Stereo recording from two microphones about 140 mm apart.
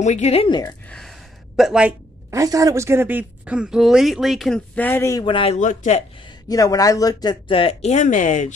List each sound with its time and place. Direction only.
0.0 s speech: 55° left (ahead or behind)
0.5 s speech: 30° left (ahead or behind)
0.8 s a sound: 5° left (ahead or behind)
1.6 s a woman's voice: 5° right (ahead or behind)
2.3 s a woman's voice: 25° right (ahead or behind); by 5.2 s 15° left (ahead or behind)
5.2 s speech: 40° left (ahead or behind)
5.6 s speech: 60° left (ahead or behind)
6.5 s speech: 25° left (ahead or behind); by 8.5 s 60° left (ahead or behind)